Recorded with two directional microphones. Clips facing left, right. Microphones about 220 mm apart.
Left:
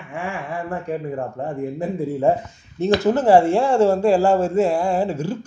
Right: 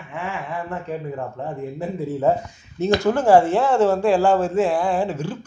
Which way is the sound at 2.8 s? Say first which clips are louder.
Left 1 dB; 5° left (ahead or behind).